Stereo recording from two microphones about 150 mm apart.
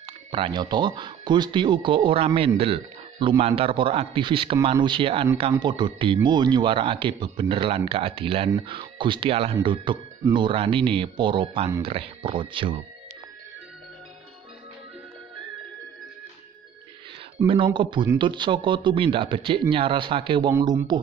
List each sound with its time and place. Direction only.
0.3 s speech: 30° right (ahead or behind)
17.5 s speech: 35° right (ahead or behind)